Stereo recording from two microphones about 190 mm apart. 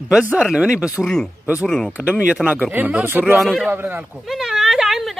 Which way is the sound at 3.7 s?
10° right (ahead or behind).